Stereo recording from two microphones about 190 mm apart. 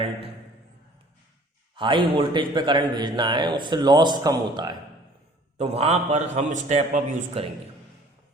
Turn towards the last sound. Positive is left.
turn(degrees=-40)  # may be behind; listen again after turning